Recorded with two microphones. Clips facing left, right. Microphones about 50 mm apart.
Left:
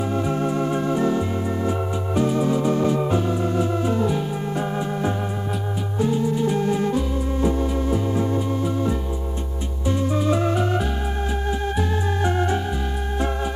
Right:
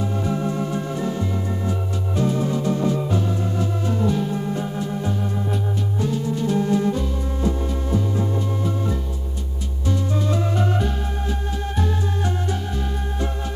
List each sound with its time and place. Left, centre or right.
0.5 s organ: left
4.6 s organ: left
5.9 s music: centre